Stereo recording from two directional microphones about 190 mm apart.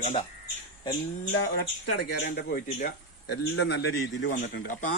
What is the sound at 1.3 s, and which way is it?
Speech, 60° left (ahead or behind).